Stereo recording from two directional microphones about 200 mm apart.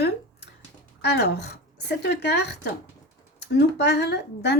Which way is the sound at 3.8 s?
55° left (ahead or behind).